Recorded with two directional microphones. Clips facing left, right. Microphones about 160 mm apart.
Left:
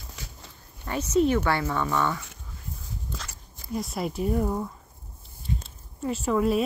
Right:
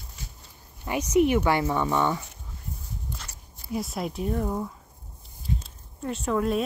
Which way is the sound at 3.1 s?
90° left.